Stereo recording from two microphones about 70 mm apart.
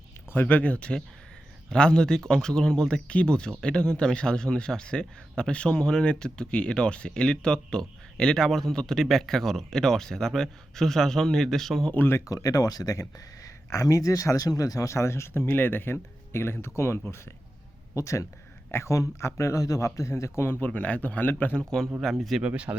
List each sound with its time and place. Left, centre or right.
0.3 s speech: left; by 11.9 s centre
11.9 s speech: left
12.3 s speech: left
15.4 s speech: left
20.7 s speech: centre
22.0 s speech: centre
22.4 s speech: centre